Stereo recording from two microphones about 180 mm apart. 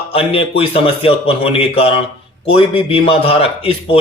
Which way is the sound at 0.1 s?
30° left (ahead or behind).